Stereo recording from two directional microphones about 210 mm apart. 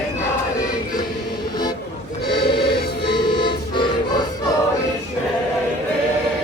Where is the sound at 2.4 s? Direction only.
25° left (ahead or behind).